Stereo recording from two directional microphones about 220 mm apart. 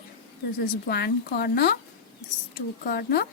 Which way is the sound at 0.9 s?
45° left (ahead or behind).